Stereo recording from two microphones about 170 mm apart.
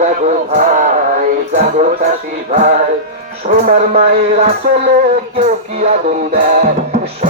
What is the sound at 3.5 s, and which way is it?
Speech, 55° right (ahead or behind).